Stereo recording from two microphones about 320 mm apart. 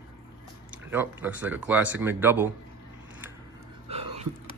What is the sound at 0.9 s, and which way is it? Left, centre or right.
Speech, centre.